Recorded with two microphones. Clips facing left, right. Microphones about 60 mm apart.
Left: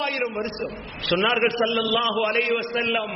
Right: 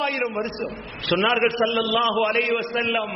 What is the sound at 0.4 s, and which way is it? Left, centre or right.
A man's voice, centre.